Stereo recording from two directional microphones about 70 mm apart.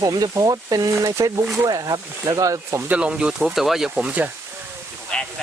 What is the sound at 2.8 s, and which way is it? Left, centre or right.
Speech, centre.